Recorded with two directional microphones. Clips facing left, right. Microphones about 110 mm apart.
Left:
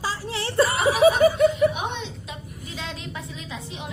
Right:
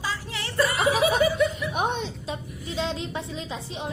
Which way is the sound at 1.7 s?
40° right (ahead or behind).